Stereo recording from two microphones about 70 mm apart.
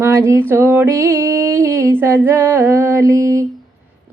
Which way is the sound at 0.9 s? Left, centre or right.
Right.